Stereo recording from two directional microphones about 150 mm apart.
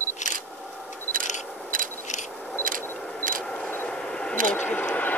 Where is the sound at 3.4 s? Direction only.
10° left (ahead or behind).